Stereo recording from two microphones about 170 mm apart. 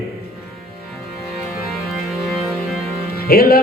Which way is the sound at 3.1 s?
60° left (ahead or behind).